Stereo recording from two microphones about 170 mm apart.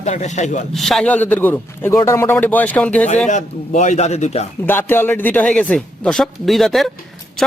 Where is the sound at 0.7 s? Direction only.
Centre (ahead or behind).